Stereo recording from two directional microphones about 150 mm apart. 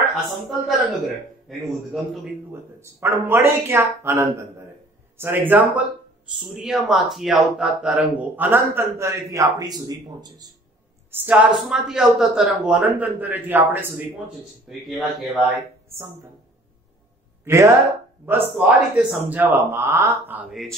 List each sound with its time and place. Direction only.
0.1 s a woman's voice: centre (ahead or behind)
2.5 s speech: 15° right (ahead or behind)
11.1 s speech: 15° right (ahead or behind)
14.7 s a woman's voice: centre (ahead or behind)
17.5 s speech: 20° right (ahead or behind)